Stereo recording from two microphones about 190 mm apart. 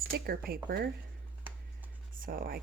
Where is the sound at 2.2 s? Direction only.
50° right (ahead or behind).